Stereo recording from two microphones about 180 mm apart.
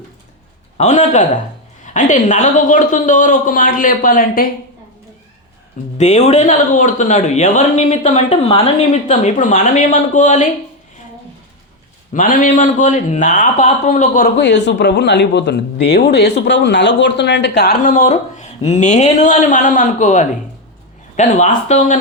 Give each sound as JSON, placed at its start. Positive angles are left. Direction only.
{"t": 0.8, "sound": "a man's voice", "side_deg": 40}
{"t": 6.0, "sound": "speech", "side_deg": 40}
{"t": 12.1, "sound": "a man's voice", "side_deg": 50}
{"t": 14.3, "sound": "speech", "side_deg": 75}
{"t": 17.8, "sound": "speech", "side_deg": 40}